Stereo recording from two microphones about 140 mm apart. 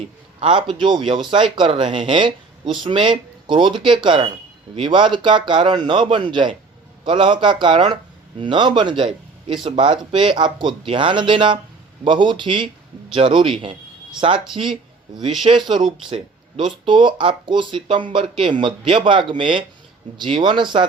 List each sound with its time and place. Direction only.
0.3 s speech: 35° right (ahead or behind)